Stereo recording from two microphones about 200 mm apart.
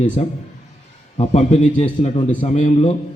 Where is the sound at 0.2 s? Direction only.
35° left (ahead or behind).